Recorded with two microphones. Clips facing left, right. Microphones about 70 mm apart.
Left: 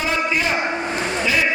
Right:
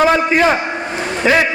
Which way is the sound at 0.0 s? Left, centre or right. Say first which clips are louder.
Right 9 dB; right.